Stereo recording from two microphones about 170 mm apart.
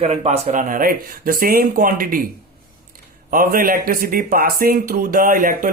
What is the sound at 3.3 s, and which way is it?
Speech, 55° right (ahead or behind).